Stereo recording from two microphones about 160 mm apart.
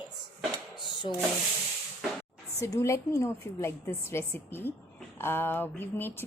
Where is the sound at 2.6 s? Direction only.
20° left (ahead or behind).